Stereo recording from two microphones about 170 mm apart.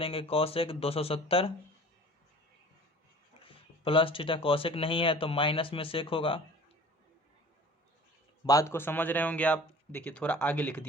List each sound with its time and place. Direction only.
0.0 s speech: 35° left (ahead or behind)
3.4 s speech: 30° left (ahead or behind)
8.4 s speech: 20° left (ahead or behind)